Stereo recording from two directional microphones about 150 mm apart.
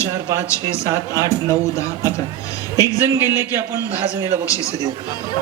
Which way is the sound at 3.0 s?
15° right (ahead or behind).